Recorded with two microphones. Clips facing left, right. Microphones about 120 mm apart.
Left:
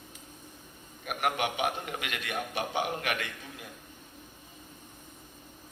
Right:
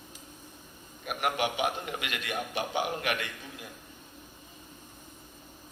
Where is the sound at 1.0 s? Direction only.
50° left (ahead or behind).